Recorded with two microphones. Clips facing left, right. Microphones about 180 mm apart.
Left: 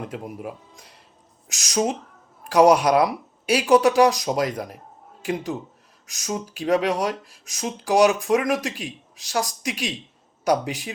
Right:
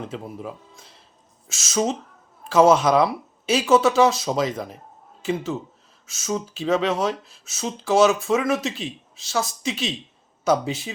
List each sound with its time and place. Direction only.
0.0 s speech: 15° left (ahead or behind)